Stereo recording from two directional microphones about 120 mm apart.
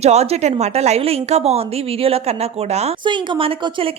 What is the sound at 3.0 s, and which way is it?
Speech, 40° right (ahead or behind).